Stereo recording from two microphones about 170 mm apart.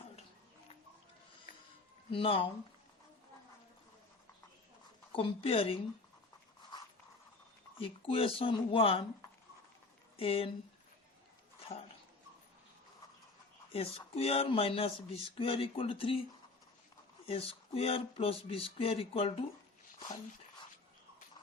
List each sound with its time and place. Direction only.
2.0 s speech: 30° left (ahead or behind)
5.1 s speech: 30° left (ahead or behind)
7.8 s speech: 35° left (ahead or behind)
10.2 s speech: 35° left (ahead or behind)
11.7 s dog: 30° left (ahead or behind)
13.7 s speech: 35° left (ahead or behind)
17.2 s speech: 35° left (ahead or behind)